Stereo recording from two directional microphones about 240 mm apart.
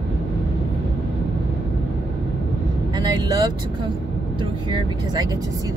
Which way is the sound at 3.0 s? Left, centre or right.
Centre.